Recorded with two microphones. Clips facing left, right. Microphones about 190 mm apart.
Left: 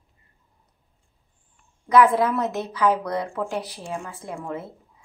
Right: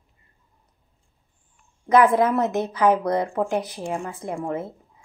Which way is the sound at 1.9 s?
50° right (ahead or behind).